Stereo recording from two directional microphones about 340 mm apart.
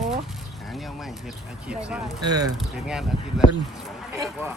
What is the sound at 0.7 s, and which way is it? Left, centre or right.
Speech, centre.